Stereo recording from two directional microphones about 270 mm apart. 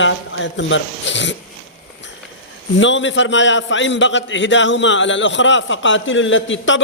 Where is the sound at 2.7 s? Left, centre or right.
Left.